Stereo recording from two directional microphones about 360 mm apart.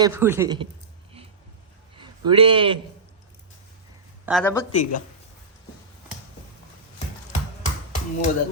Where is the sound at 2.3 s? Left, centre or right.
Centre.